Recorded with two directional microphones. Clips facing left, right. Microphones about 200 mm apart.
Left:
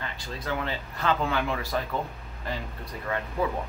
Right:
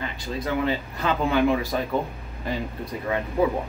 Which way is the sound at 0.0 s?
15° right (ahead or behind).